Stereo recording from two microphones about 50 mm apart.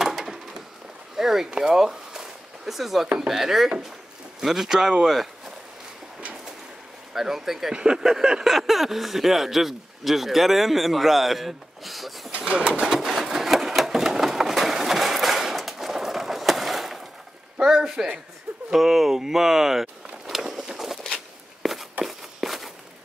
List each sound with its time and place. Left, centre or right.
0.0 s a sound: centre
3.3 s speech: centre
7.2 s speech: centre
12.4 s speech: right
12.9 s sewing machine: centre
17.6 s a sound: centre
21.6 s walk: centre